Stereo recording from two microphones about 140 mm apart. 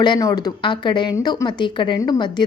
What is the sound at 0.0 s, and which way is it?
Speech, 30° left (ahead or behind).